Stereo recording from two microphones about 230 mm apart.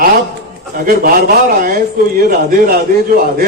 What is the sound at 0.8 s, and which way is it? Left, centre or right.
Speech, right.